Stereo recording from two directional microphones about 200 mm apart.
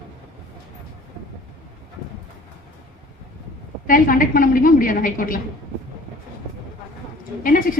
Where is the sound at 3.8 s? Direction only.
45° left (ahead or behind).